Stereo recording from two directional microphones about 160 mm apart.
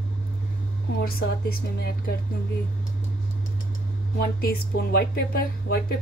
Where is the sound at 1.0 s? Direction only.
70° left (ahead or behind).